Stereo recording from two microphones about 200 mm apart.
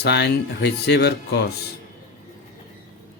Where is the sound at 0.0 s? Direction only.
55° left (ahead or behind).